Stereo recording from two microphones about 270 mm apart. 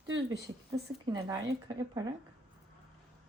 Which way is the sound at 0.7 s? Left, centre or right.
Centre.